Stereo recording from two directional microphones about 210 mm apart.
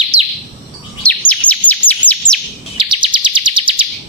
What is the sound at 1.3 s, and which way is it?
Chirp, 5° left (ahead or behind).